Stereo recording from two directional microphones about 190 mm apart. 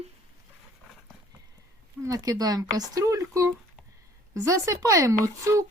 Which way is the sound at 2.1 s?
20° right (ahead or behind).